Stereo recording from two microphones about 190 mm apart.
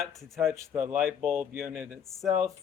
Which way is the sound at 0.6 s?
10° right (ahead or behind).